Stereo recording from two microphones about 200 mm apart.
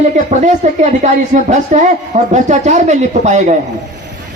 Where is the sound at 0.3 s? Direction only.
35° right (ahead or behind).